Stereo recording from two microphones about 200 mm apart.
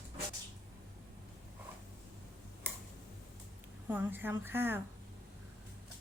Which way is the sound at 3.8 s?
10° right (ahead or behind).